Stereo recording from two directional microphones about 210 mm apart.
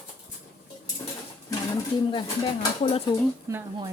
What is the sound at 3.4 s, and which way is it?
Speech, 15° right (ahead or behind).